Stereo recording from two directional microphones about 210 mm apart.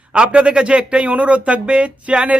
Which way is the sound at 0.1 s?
5° right (ahead or behind).